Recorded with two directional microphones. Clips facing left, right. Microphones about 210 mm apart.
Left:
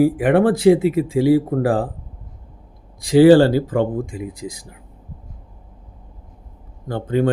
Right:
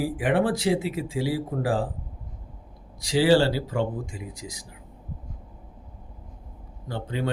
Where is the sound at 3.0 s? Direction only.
55° left (ahead or behind).